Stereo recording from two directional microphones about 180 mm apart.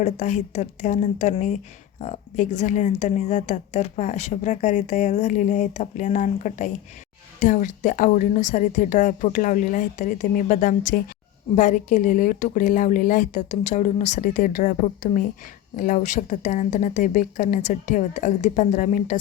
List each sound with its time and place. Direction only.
0.0 s a woman's voice: 40° left (ahead or behind)